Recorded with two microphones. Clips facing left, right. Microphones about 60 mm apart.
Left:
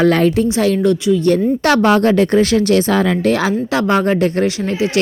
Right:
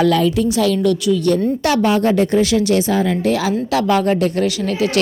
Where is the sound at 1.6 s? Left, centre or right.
Left.